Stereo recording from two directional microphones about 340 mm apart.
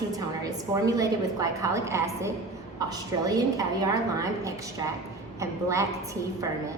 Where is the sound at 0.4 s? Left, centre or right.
Centre.